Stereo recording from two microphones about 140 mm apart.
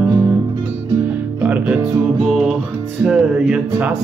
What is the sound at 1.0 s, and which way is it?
Music, 10° right (ahead or behind).